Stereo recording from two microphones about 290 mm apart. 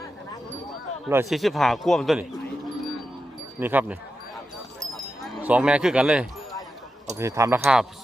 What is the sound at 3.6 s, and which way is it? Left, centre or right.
Speech, centre.